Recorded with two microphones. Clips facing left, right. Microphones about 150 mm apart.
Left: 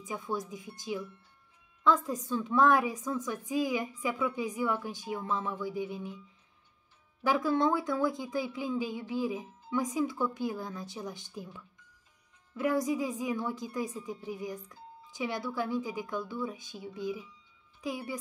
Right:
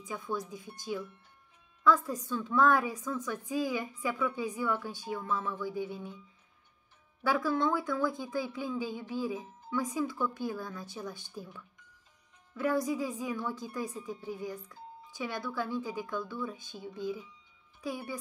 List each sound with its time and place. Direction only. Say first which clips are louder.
0.0 s speech: left 1 dB; 20° left (ahead or behind)
7.2 s speech: left 2 dB; 20° left (ahead or behind)